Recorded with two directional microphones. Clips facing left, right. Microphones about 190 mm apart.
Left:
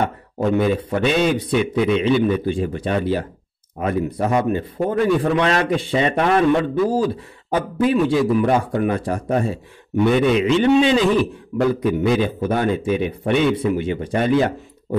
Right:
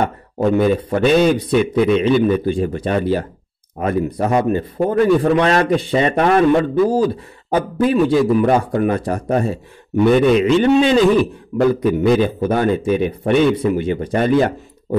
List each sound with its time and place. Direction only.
0.4 s a man's voice: 40° right (ahead or behind)